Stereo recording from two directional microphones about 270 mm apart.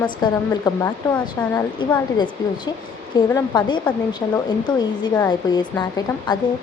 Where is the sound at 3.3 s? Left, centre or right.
Centre.